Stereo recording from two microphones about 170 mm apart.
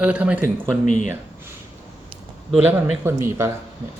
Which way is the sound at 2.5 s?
5° right (ahead or behind).